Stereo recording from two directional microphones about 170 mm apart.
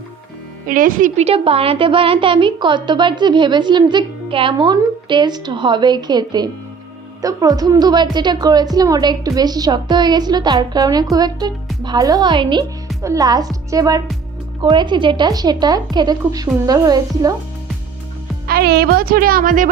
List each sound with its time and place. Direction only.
0.7 s a woman's voice: 55° right (ahead or behind)
1.2 s a woman's voice: 35° right (ahead or behind)
18.4 s speech: 65° right (ahead or behind)